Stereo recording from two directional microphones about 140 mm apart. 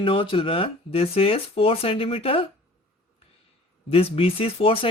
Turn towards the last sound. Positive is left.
turn(degrees=40)  # may be behind; listen again after turning